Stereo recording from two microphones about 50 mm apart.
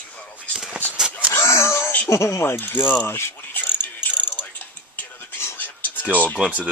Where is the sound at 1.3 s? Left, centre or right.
Left.